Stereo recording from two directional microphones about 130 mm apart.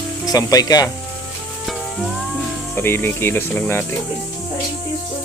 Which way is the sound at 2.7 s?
15° left (ahead or behind).